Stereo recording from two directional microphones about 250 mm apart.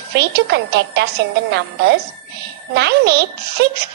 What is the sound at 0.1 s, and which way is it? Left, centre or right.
A woman's voice, right.